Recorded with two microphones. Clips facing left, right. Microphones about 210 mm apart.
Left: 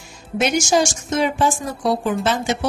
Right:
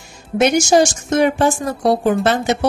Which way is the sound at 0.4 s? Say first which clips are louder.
Right 5 dB; 60° right (ahead or behind).